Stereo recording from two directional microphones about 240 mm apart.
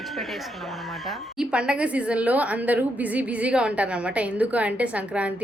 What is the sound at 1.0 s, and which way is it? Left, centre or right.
A woman's voice, centre.